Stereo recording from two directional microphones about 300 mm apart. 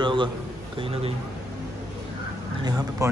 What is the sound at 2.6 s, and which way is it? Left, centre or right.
Speech, centre.